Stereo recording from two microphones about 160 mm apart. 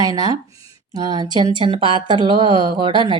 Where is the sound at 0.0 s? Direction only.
25° right (ahead or behind).